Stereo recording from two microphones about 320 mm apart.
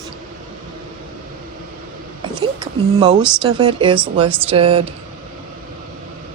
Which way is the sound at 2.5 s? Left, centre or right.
Centre.